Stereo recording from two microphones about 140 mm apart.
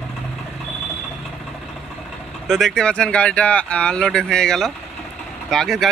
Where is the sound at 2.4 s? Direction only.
5° left (ahead or behind).